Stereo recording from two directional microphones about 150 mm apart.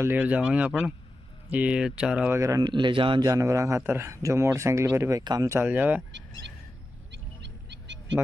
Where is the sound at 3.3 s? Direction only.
20° right (ahead or behind).